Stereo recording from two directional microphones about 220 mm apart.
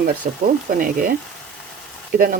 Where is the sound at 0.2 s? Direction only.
40° right (ahead or behind).